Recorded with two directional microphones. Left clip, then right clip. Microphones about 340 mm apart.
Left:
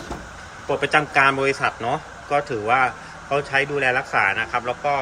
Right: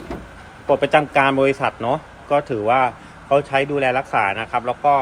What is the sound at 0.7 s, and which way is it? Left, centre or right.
Speech, centre.